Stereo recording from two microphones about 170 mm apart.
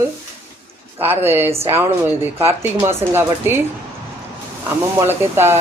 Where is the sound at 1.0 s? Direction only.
10° right (ahead or behind).